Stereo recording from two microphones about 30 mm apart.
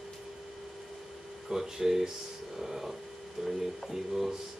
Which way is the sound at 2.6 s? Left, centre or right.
Centre.